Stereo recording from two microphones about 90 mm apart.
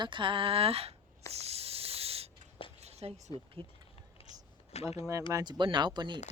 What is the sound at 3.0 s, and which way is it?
Speech, 90° right.